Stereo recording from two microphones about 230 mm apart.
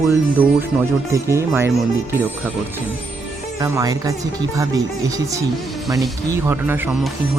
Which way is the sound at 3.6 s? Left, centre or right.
Centre.